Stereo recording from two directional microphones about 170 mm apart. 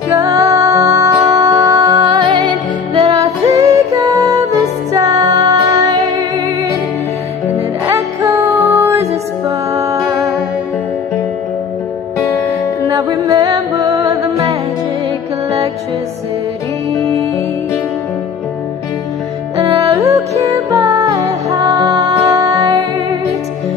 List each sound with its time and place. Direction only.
0.2 s music: 20° right (ahead or behind)
7.8 s music: 15° right (ahead or behind)
12.9 s music: 20° right (ahead or behind)
19.6 s music: 20° right (ahead or behind)